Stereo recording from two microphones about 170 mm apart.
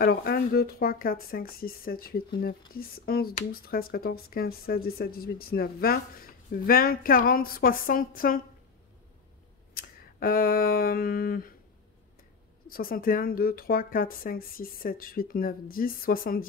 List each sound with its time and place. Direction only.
0.0 s speech: 60° left (ahead or behind)
9.8 s a sound: 60° left (ahead or behind)
12.6 s speech: 60° left (ahead or behind)